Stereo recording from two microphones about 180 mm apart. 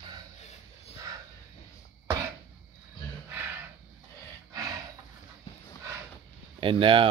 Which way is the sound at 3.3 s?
10° right (ahead or behind).